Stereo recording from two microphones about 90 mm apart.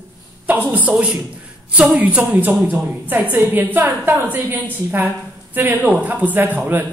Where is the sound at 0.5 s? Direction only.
20° right (ahead or behind).